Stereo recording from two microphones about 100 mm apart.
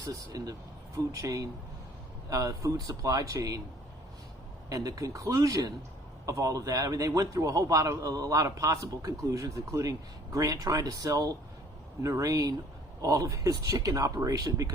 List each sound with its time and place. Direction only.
0.0 s a man's voice: 35° right (ahead or behind)
4.7 s a man's voice: 35° right (ahead or behind)